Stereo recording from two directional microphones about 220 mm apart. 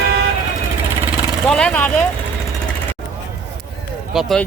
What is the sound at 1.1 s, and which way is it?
Speech, centre (ahead or behind).